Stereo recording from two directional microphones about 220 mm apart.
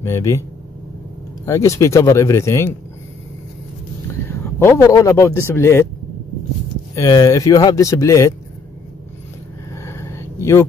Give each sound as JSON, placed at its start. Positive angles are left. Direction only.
{"t": 0.0, "sound": "speech", "side_deg": 15}
{"t": 1.4, "sound": "speech", "side_deg": 15}
{"t": 4.6, "sound": "speech", "side_deg": 15}
{"t": 7.0, "sound": "speech", "side_deg": 15}
{"t": 9.7, "sound": "a sound", "side_deg": 10}